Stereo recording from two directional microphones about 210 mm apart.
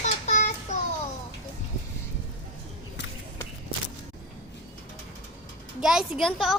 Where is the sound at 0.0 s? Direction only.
35° left (ahead or behind).